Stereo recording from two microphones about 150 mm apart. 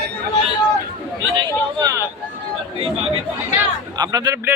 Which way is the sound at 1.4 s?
25° right (ahead or behind).